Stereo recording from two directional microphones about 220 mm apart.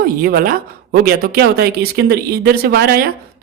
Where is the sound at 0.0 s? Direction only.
45° right (ahead or behind).